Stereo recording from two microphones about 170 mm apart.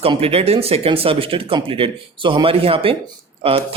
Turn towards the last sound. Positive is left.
turn(degrees=-35)  # may be behind; listen again after turning